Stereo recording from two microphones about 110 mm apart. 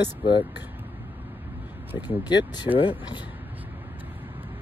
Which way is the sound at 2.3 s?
40° left (ahead or behind).